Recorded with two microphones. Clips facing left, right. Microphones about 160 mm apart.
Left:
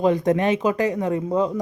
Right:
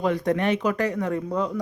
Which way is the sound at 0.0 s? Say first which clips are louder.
Left 4 dB; 20° left (ahead or behind).